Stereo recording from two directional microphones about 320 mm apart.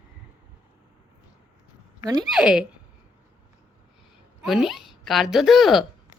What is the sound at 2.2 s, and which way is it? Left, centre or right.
Speech, centre.